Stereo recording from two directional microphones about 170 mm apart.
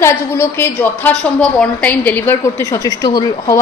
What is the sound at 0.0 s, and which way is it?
A woman's voice, 15° left (ahead or behind).